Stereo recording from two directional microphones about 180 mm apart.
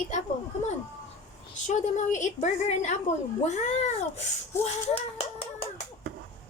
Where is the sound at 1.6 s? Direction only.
40° left (ahead or behind).